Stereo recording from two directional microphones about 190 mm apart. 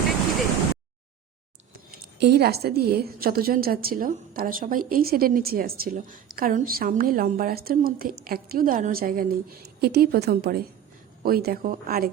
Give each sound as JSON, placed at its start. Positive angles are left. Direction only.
{"t": 2.2, "sound": "a woman's voice", "side_deg": -55}